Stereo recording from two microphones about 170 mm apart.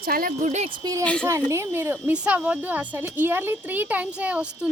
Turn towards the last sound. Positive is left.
turn(degrees=-10)  # may be behind; listen again after turning